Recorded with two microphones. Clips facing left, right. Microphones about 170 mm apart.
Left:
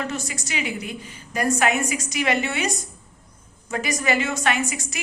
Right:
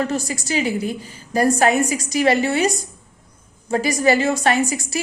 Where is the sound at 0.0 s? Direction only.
35° right (ahead or behind).